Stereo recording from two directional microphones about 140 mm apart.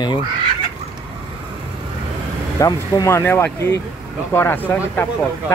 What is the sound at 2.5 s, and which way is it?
Speech, 25° left (ahead or behind).